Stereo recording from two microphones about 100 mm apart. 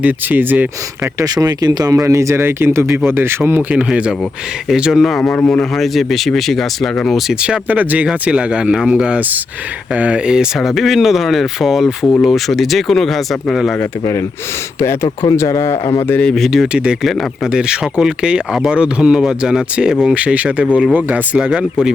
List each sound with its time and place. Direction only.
0.0 s speech: 20° right (ahead or behind)
1.2 s speech: 40° right (ahead or behind); by 5.2 s centre (ahead or behind)
5.2 s speech: 15° left (ahead or behind)
5.5 s speech: 5° left (ahead or behind)
7.3 s speech: 10° right (ahead or behind)
15.2 s speech: 35° left (ahead or behind)
16.0 s speech: 10° left (ahead or behind); by 21.9 s 10° right (ahead or behind)